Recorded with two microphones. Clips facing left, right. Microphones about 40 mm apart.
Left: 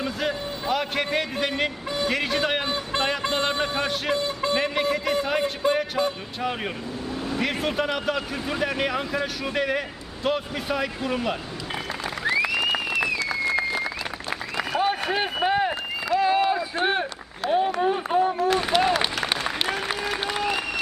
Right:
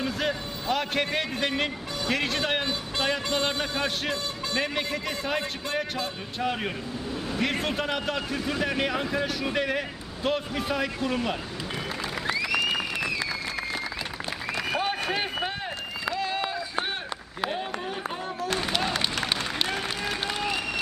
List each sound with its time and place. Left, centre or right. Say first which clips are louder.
0.0 s a man's voice: left 1 dB; centre
3.2 s speech: left 3 dB; left
3.6 s a man's voice: left 3 dB; centre
4.1 s a man's voice: left 6 dB; centre
4.6 s a man's voice: left 5 dB; centre
13.2 s a sound: left 7 dB; centre
14.3 s applause: left 2 dB; centre
14.8 s a sound: left 7 dB; centre
16.1 s run: left 11 dB; centre
17.5 s a sound: left 10 dB; centre
19.1 s applause: left 2 dB; centre